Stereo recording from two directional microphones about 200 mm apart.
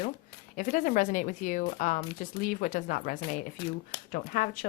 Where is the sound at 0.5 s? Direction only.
40° left (ahead or behind).